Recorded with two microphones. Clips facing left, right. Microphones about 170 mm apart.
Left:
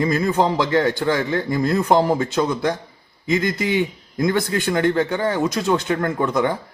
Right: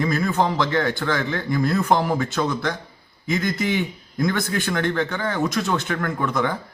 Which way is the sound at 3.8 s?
20° left (ahead or behind).